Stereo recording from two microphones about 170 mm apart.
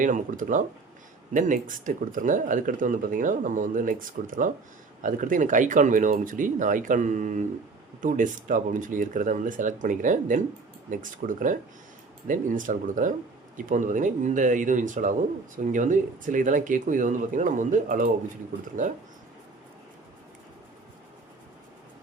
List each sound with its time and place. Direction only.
0.0 s speech: 50° right (ahead or behind)